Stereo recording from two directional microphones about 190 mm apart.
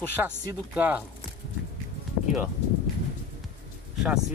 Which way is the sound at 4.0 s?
Centre (ahead or behind).